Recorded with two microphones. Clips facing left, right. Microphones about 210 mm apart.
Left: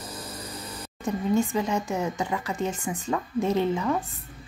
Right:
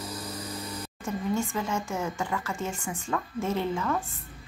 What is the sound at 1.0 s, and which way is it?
Speech, 15° left (ahead or behind).